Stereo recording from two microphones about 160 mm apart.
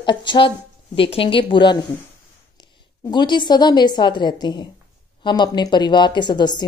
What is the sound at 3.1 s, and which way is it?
A man's voice, 30° left (ahead or behind).